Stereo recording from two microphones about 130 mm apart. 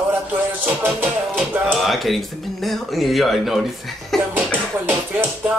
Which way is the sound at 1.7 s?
Centre (ahead or behind).